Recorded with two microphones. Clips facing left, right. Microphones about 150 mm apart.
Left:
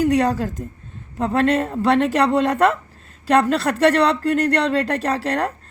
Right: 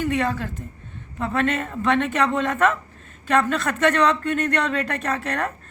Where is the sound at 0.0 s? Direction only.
40° left (ahead or behind).